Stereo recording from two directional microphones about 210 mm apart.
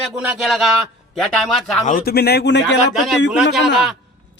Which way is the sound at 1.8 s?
40° left (ahead or behind).